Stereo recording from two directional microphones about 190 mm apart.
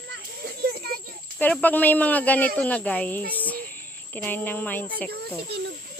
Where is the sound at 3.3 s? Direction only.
10° left (ahead or behind).